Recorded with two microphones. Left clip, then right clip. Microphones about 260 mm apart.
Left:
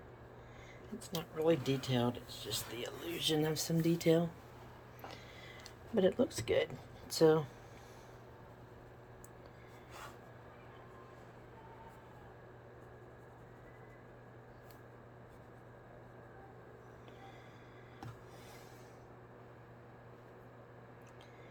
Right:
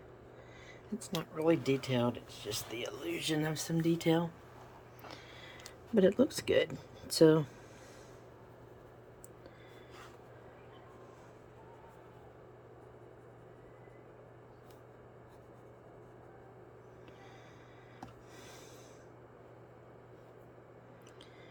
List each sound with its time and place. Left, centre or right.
0.9 s speech: right
5.9 s speech: right